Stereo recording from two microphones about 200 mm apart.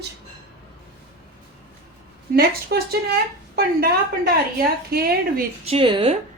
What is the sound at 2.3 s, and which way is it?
A woman's voice, 50° right (ahead or behind).